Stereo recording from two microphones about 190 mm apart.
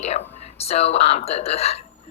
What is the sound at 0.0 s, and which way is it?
A woman's voice, 35° left (ahead or behind).